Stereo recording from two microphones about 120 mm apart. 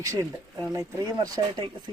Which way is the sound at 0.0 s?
25° right (ahead or behind).